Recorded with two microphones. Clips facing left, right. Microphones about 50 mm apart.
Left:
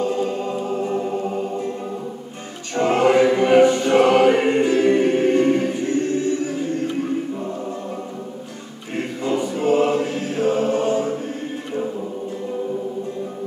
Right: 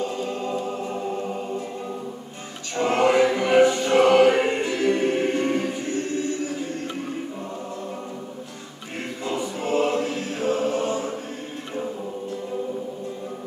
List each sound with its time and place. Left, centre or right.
2.7 s choir: centre
5.2 s music: centre
8.9 s music: centre